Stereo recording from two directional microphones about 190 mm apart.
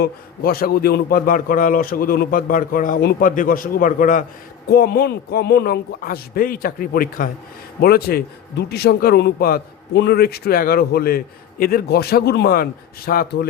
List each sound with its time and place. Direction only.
0.0 s a man's voice: 50° left (ahead or behind)
4.7 s a man's voice: 55° left (ahead or behind)